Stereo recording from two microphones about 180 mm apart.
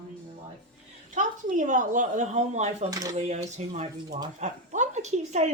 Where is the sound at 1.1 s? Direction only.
45° right (ahead or behind).